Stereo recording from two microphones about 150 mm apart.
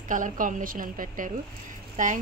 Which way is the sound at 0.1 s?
60° right (ahead or behind).